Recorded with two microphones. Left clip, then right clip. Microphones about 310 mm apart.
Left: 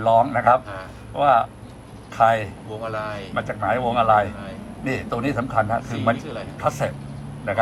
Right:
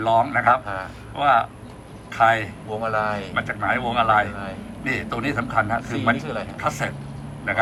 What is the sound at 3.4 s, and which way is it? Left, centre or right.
Speech, centre.